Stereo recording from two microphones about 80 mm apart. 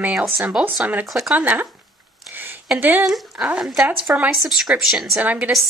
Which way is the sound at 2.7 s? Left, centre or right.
Right.